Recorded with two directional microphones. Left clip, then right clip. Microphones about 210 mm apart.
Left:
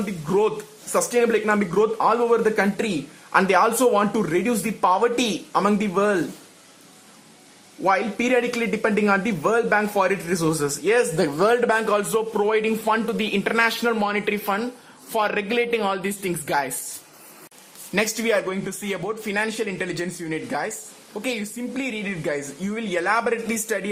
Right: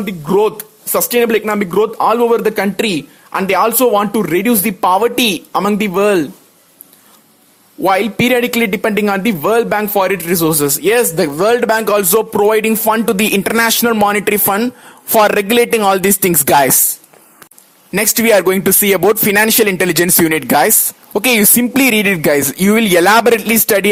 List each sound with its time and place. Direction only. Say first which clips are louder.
0.0 s speech: right 8 dB; 40° right (ahead or behind)
7.9 s speech: right 8 dB; 35° right (ahead or behind)
17.9 s speech: right 10 dB; 40° right (ahead or behind)